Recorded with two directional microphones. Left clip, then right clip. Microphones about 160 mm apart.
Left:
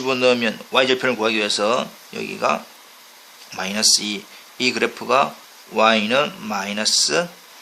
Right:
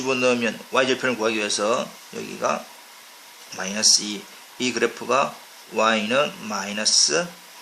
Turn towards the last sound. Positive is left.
turn(degrees=35)  # may be behind; listen again after turning